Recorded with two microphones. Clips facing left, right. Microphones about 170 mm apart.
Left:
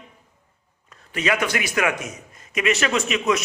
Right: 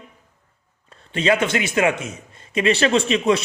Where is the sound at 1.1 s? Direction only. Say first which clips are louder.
Right 4 dB; 30° right (ahead or behind).